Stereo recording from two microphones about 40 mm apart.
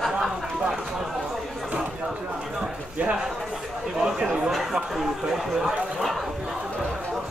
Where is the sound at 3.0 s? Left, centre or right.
Right.